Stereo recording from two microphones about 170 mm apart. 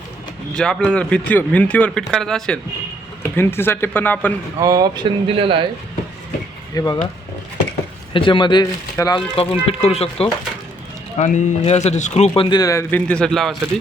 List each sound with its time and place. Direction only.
0.5 s speech: 5° left (ahead or behind)
3.3 s speech: 15° left (ahead or behind)
4.6 s speech: 20° right (ahead or behind)
6.7 s speech: 25° left (ahead or behind)
8.1 s speech: 30° left (ahead or behind)
9.3 s speech: 35° left (ahead or behind)
12.3 s speech: 25° left (ahead or behind); by 13.6 s centre (ahead or behind)